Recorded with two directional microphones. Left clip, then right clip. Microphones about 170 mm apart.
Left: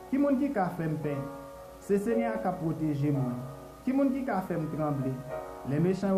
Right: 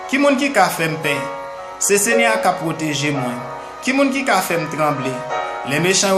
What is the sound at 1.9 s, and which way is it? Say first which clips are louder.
Speech: right 14 dB; 15° right (ahead or behind).